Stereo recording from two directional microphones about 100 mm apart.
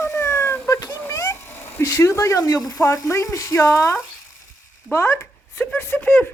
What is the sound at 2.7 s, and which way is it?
Speech, 35° left (ahead or behind).